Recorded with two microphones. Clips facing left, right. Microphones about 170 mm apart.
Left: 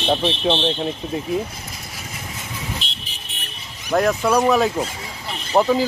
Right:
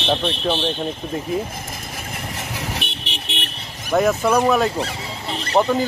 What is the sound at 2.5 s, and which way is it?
Vehicle, 70° right (ahead or behind).